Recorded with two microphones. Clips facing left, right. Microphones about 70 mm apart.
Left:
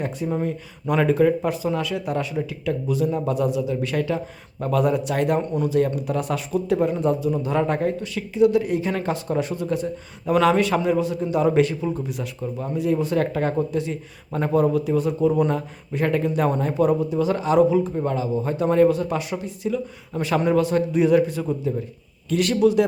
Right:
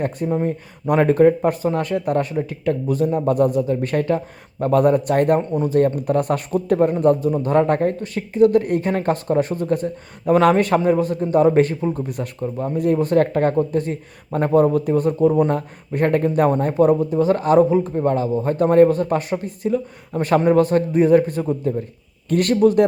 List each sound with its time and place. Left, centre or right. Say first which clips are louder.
0.4 s a man's voice: right 4 dB; right
5.4 s speech: right 2 dB; right
5.6 s a man's voice: right 5 dB; right